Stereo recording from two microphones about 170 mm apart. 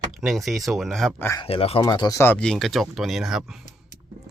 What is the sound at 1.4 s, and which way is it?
Speech, 35° left (ahead or behind).